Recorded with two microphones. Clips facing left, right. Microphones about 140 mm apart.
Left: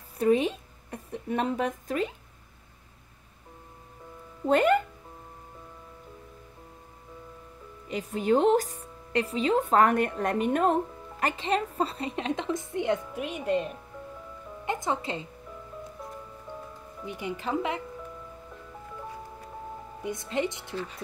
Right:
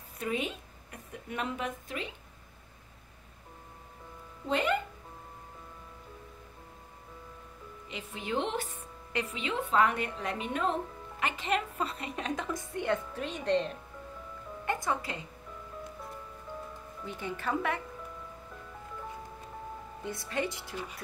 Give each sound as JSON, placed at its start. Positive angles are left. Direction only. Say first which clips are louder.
{"t": 0.2, "sound": "a woman's voice", "louder": "left 10 dB", "side_deg": 35}
{"t": 4.5, "sound": "speech", "louder": "left 8 dB", "side_deg": 50}
{"t": 7.9, "sound": "a woman's voice", "louder": "left 10 dB", "side_deg": 40}
{"t": 14.6, "sound": "speech", "louder": "left 2 dB", "side_deg": 20}
{"t": 17.0, "sound": "a woman's voice", "louder": "left 3 dB", "side_deg": 15}
{"t": 20.0, "sound": "speech", "louder": "left 4 dB", "side_deg": 20}